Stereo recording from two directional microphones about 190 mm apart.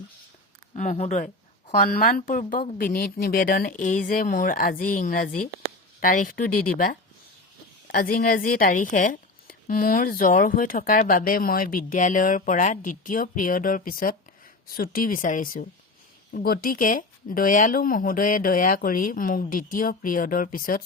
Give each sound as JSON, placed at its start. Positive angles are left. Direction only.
{"t": 0.8, "sound": "speech", "side_deg": 40}